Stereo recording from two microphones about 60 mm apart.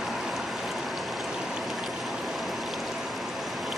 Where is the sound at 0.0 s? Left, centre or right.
Centre.